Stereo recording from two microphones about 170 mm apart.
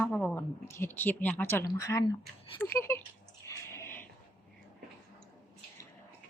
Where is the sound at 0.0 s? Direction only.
10° left (ahead or behind).